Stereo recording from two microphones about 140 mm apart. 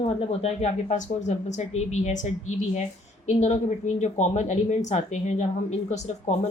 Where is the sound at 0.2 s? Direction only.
45° left (ahead or behind).